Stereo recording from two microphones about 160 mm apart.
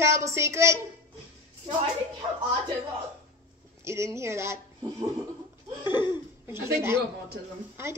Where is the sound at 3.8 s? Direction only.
15° right (ahead or behind).